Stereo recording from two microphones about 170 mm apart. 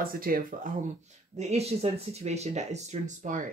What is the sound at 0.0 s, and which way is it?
Speech, 60° right (ahead or behind).